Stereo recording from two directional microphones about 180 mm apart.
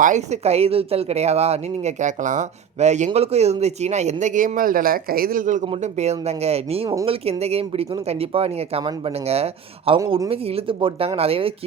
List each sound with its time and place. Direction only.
0.0 s speech: 40° right (ahead or behind)